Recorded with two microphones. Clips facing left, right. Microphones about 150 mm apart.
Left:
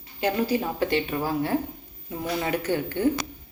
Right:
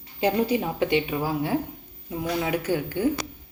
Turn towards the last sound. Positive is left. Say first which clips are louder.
# even
turn(degrees=-10)  # may be behind; listen again after turning